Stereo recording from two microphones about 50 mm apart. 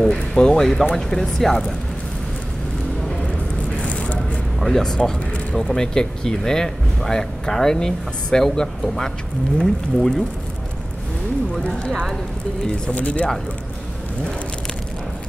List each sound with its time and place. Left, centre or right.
0.2 s speech: centre
3.8 s a sound: left
4.6 s speech: centre
12.9 s speech: left